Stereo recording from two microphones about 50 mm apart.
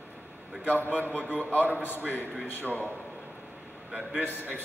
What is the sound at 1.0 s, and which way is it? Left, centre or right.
Speech, left.